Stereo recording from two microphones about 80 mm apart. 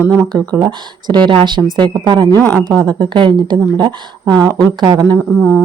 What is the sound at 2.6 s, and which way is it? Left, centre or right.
Speech, right.